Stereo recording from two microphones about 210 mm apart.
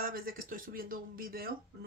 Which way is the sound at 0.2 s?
45° right (ahead or behind).